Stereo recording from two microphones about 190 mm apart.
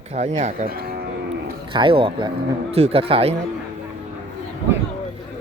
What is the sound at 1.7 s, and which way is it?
A man's voice, 25° right (ahead or behind).